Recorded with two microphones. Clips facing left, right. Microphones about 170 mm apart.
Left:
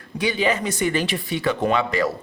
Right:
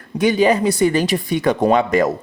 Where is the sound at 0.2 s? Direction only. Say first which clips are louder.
Right 7 dB; 45° right (ahead or behind).